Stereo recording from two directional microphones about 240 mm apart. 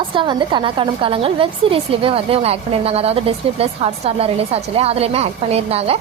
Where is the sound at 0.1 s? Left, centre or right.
Centre.